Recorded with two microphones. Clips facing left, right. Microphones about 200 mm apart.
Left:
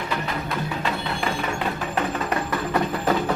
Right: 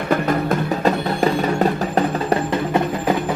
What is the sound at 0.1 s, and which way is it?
Music, 50° right (ahead or behind).